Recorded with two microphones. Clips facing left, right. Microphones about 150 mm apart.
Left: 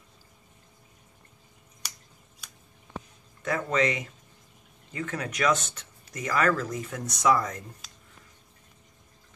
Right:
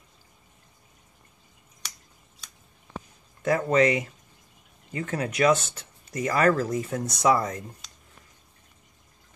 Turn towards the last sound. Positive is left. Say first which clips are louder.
# right 2 dB
turn(degrees=-30)  # may be behind; listen again after turning